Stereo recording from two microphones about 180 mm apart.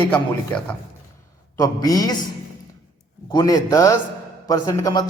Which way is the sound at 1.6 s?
20° left (ahead or behind).